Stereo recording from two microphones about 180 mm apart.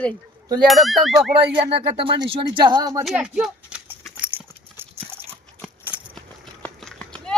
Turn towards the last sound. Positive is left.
turn(degrees=5)  # may be behind; listen again after turning